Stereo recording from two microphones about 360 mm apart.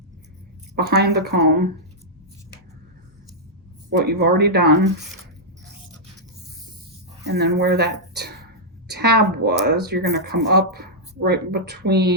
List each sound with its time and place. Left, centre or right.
0.8 s speech: right
3.8 s speech: right
7.3 s speech: right
8.1 s a sound: right
8.9 s speech: right